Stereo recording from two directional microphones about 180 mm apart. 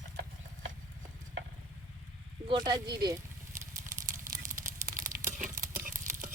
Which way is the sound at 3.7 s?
50° right (ahead or behind).